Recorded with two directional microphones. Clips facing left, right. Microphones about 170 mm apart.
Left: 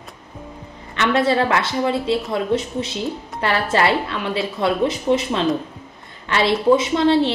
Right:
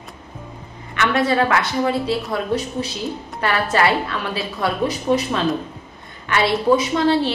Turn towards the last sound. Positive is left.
turn(degrees=25)  # may be behind; listen again after turning